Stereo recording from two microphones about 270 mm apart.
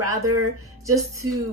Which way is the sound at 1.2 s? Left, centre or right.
Right.